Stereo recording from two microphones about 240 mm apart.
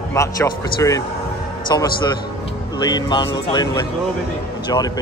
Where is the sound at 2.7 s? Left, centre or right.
Centre.